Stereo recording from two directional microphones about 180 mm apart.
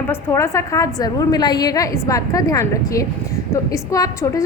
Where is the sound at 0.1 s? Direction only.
15° left (ahead or behind).